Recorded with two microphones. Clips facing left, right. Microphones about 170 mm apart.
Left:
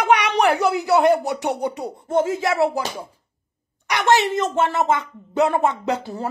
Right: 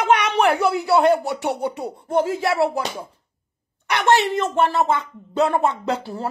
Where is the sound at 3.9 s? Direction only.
15° left (ahead or behind).